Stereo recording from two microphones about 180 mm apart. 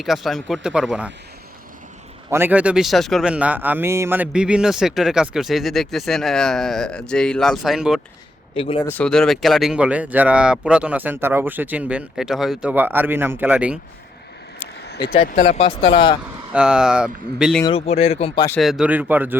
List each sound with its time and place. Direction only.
0.0 s a man's voice: centre (ahead or behind)
2.3 s a man's voice: 10° right (ahead or behind)
8.5 s speech: 30° left (ahead or behind)
8.9 s speech: 5° left (ahead or behind)
14.8 s a sound: 65° left (ahead or behind)
15.3 s speech: 40° left (ahead or behind)
15.6 s speech: 30° left (ahead or behind)
16.5 s a man's voice: 5° right (ahead or behind)
17.7 s speech: 35° left (ahead or behind)
18.6 s speech: 5° right (ahead or behind)